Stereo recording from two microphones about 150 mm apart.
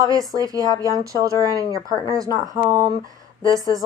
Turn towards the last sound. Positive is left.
turn(degrees=-25)  # may be behind; listen again after turning